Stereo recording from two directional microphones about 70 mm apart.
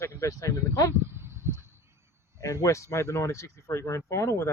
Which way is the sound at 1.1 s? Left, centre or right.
Right.